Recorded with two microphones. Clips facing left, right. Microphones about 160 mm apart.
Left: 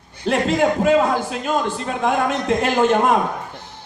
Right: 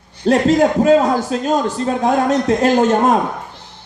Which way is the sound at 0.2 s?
35° right (ahead or behind).